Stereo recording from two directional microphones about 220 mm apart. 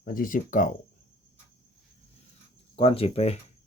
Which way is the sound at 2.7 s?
25° left (ahead or behind).